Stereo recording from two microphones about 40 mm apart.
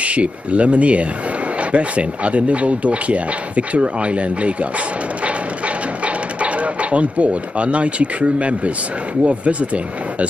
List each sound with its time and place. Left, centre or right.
0.0 s speech: right
6.0 s speech: right